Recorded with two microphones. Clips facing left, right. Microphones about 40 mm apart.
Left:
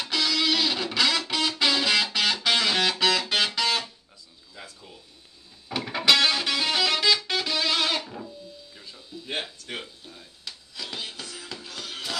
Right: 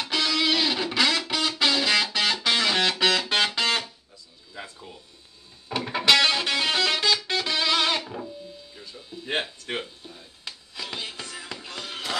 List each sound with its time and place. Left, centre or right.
0.0 s music: centre
4.6 s a sound: right
5.7 s music: centre
7.1 s music: centre
7.4 s music: centre
9.2 s a sound: right
10.4 s music: right